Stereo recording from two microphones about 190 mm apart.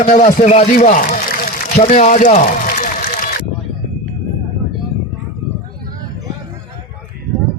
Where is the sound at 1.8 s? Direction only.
40° left (ahead or behind).